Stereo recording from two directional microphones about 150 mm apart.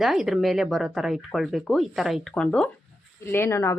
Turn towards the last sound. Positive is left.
turn(degrees=15)  # may be behind; listen again after turning